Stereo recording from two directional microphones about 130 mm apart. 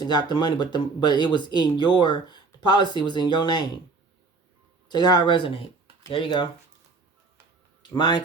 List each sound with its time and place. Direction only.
0.0 s speech: 35° left (ahead or behind)
4.9 s speech: 35° left (ahead or behind)
7.8 s speech: 35° left (ahead or behind)